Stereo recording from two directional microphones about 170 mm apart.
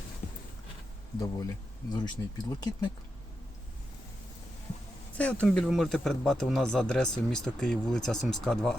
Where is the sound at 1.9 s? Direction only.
25° left (ahead or behind).